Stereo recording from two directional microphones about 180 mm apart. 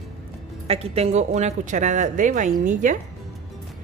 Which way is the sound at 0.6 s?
35° right (ahead or behind).